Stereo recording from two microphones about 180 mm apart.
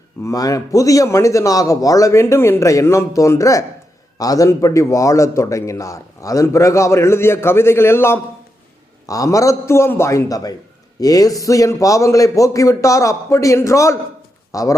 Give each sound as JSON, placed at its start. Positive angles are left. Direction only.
{"t": 0.2, "sound": "a man's voice", "side_deg": 20}